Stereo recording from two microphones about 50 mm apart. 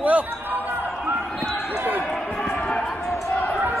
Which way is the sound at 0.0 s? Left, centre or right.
Right.